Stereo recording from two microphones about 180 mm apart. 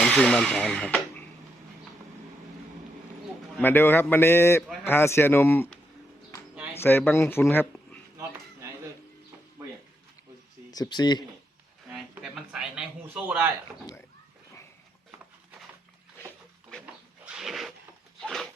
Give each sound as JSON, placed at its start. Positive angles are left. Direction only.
{"t": 0.0, "sound": "speech", "side_deg": 5}
{"t": 3.6, "sound": "a man's voice", "side_deg": 10}
{"t": 6.8, "sound": "speech", "side_deg": 10}
{"t": 10.7, "sound": "speech", "side_deg": 20}
{"t": 11.9, "sound": "a sound", "side_deg": -5}
{"t": 17.3, "sound": "a sound", "side_deg": 0}